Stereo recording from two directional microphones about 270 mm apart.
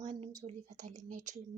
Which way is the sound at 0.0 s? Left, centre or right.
Centre.